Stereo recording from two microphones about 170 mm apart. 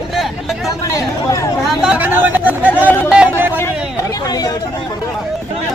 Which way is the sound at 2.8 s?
15° left (ahead or behind).